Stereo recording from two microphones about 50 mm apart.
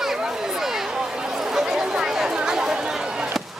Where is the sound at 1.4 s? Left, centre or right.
Centre.